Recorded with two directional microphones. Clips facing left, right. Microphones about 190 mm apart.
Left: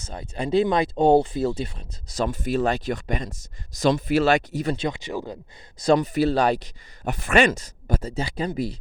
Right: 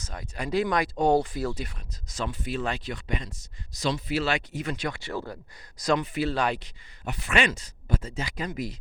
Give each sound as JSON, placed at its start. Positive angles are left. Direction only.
{"t": 0.0, "sound": "speech", "side_deg": 30}
{"t": 4.9, "sound": "speech", "side_deg": 20}